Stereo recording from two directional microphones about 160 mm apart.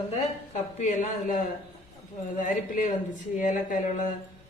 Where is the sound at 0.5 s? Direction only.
50° left (ahead or behind).